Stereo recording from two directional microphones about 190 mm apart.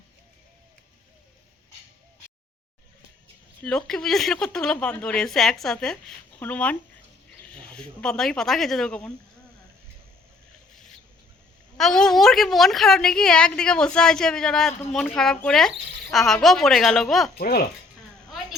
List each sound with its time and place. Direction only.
3.6 s a woman's voice: 5° left (ahead or behind)
11.8 s a woman's voice: centre (ahead or behind)
17.3 s speech: 55° left (ahead or behind)